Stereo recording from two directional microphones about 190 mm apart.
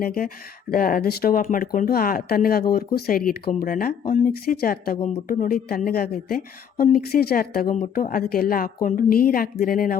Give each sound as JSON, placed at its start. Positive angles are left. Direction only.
{"t": 0.0, "sound": "speech", "side_deg": 50}